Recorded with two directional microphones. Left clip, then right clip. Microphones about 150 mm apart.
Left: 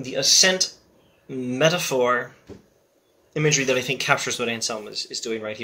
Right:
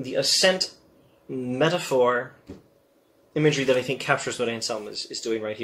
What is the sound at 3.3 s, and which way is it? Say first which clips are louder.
Speech: even; 15° left (ahead or behind).